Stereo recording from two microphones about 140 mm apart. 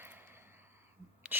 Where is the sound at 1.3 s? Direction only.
15° right (ahead or behind).